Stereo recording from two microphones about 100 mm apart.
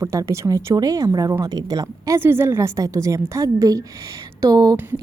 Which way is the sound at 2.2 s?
25° right (ahead or behind).